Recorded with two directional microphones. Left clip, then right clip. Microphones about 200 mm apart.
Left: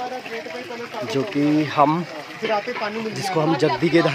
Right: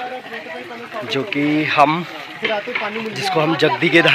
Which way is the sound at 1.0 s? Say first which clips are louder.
Right 2 dB; 20° left (ahead or behind).